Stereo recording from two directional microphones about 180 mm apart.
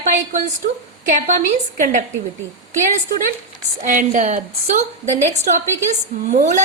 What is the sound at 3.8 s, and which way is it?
A woman's voice, 45° right (ahead or behind).